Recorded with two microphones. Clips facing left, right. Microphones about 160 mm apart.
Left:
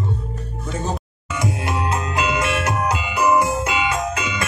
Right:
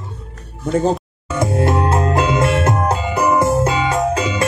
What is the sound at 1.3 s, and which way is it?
Music, 50° right (ahead or behind).